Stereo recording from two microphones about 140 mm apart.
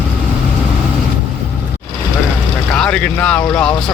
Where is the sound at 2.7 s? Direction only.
5° left (ahead or behind).